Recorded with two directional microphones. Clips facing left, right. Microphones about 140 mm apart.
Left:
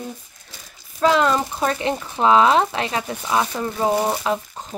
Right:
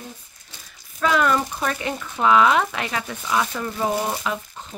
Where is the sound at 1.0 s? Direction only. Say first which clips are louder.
Left 3 dB; 25° left (ahead or behind).